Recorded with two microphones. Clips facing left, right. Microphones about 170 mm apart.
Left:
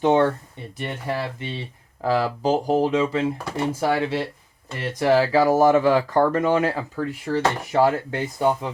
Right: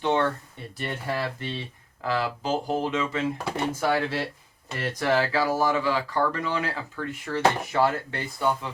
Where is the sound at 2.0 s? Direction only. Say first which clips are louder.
Left 6 dB; 35° left (ahead or behind).